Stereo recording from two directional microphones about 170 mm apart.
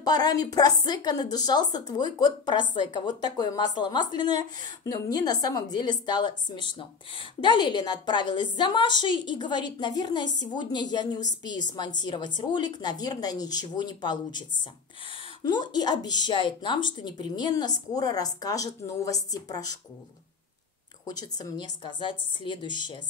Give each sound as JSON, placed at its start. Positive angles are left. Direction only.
{"t": 0.0, "sound": "a woman's voice", "side_deg": 25}
{"t": 15.4, "sound": "a woman's voice", "side_deg": 25}
{"t": 21.0, "sound": "a woman's voice", "side_deg": 20}